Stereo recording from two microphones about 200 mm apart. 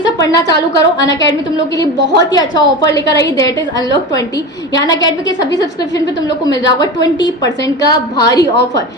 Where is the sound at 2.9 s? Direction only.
60° left (ahead or behind).